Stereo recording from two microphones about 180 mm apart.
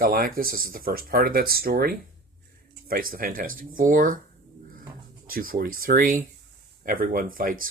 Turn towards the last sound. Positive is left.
turn(degrees=-50)  # may be behind; listen again after turning